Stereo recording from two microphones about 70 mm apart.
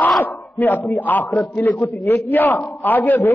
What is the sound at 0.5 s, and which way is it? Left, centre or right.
A man's voice, left.